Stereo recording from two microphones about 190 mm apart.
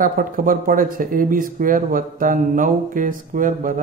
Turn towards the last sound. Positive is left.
turn(degrees=-45)  # may be behind; listen again after turning